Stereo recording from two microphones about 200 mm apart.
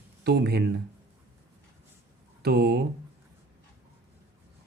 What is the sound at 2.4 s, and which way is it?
Speech, 50° right (ahead or behind).